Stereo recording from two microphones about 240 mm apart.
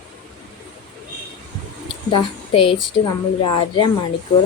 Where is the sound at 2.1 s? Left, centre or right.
Left.